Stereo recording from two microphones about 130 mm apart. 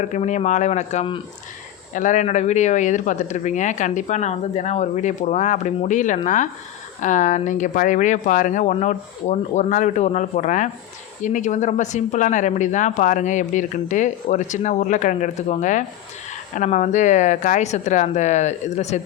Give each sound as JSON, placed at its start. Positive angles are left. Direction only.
{"t": 0.0, "sound": "speech", "side_deg": 65}
{"t": 1.9, "sound": "speech", "side_deg": 75}